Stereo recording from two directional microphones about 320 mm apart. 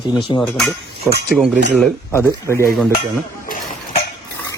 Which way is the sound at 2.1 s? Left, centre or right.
Centre.